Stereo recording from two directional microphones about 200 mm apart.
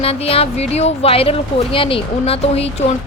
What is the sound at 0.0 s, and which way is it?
A woman's voice, 30° left (ahead or behind).